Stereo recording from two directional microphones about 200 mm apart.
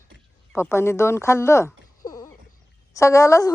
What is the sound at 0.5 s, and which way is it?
Speech, 10° left (ahead or behind).